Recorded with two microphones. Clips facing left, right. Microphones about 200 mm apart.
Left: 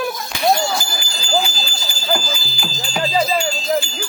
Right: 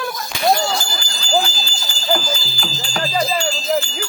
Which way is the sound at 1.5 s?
15° left (ahead or behind).